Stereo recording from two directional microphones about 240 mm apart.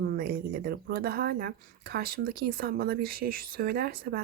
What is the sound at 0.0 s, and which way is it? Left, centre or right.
Speech, right.